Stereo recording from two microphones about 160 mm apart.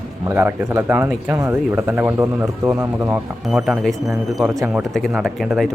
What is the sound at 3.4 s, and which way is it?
Speech, centre (ahead or behind).